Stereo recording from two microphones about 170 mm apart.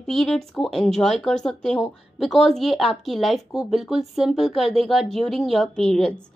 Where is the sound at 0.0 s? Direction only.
Centre (ahead or behind).